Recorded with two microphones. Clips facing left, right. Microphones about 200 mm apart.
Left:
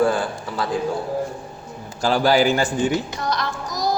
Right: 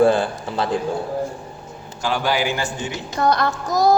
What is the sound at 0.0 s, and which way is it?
Speech, 25° right (ahead or behind).